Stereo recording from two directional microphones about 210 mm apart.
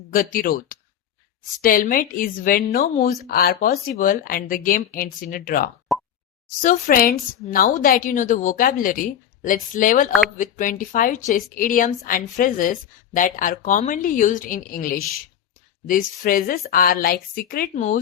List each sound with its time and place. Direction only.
0.1 s speech: 40° left (ahead or behind)
5.9 s plop: centre (ahead or behind)
6.6 s a woman's voice: 40° left (ahead or behind)
10.1 s speech: centre (ahead or behind)
10.3 s a woman's voice: 40° left (ahead or behind)